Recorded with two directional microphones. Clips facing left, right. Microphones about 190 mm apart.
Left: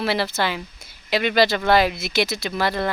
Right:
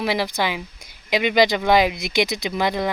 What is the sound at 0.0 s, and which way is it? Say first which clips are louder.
Speech: even; 15° right (ahead or behind).